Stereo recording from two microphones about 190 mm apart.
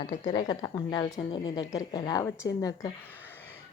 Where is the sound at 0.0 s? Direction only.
25° left (ahead or behind).